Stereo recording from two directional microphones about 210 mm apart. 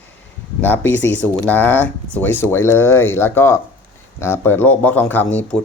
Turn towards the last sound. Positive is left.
turn(degrees=5)  # may be behind; listen again after turning